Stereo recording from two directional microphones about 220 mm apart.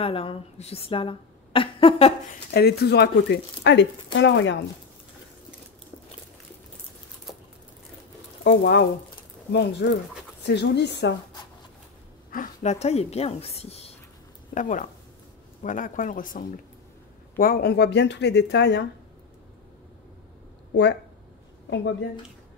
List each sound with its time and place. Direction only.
0.0 s a woman's voice: 25° left (ahead or behind)
2.5 s speech: 45° left (ahead or behind)
8.5 s speech: 50° left (ahead or behind)
12.3 s a woman's voice: 35° left (ahead or behind); by 18.9 s 50° left (ahead or behind)